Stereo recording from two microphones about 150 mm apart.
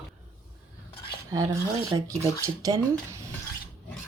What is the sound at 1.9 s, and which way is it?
Speech, 25° right (ahead or behind).